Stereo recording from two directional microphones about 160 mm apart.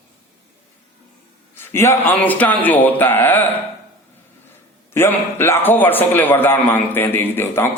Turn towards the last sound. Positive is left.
turn(degrees=15)  # may be behind; listen again after turning